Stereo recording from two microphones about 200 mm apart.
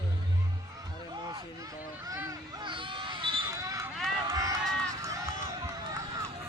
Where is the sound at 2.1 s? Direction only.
20° right (ahead or behind).